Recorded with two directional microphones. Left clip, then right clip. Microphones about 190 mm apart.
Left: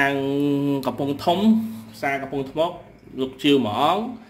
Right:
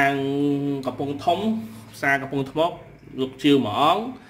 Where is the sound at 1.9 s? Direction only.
10° right (ahead or behind).